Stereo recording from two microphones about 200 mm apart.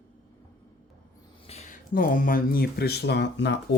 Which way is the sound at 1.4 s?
30° left (ahead or behind).